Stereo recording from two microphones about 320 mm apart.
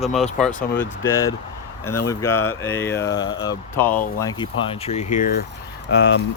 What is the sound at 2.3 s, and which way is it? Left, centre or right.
Speech, left.